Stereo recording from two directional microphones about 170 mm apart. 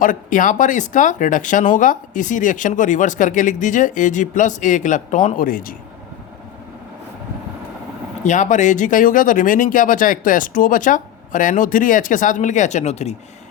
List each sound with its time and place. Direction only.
0.0 s speech: 50° left (ahead or behind)
8.2 s speech: 45° left (ahead or behind)